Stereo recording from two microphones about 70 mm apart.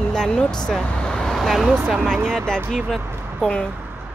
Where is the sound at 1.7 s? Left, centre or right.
Right.